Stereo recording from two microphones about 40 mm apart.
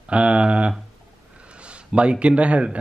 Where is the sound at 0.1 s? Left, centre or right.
Right.